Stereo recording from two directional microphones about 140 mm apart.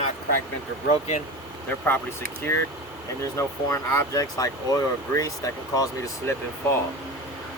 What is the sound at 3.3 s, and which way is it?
Speech, 20° left (ahead or behind).